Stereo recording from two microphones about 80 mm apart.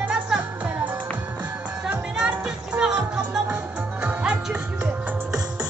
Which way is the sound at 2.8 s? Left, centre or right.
Centre.